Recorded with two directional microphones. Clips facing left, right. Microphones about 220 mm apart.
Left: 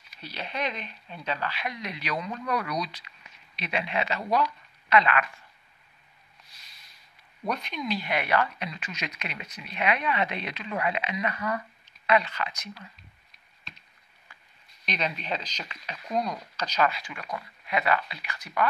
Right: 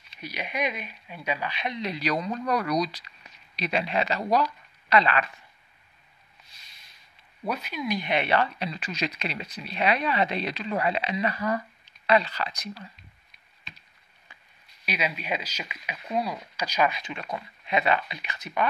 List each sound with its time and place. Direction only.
0.2 s speech: 10° right (ahead or behind); by 5.2 s 35° right (ahead or behind)
7.4 s speech: 5° right (ahead or behind)
8.0 s speech: 25° right (ahead or behind)
14.9 s speech: 5° right (ahead or behind)